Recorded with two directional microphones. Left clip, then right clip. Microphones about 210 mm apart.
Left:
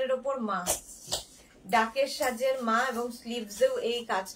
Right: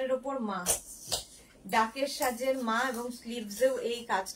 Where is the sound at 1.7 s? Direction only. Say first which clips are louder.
Left 3 dB; 15° left (ahead or behind).